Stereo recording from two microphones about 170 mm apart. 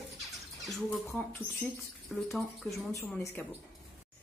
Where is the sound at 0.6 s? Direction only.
Centre (ahead or behind).